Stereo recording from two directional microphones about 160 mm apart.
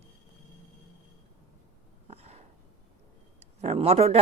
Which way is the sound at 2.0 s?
40° right (ahead or behind).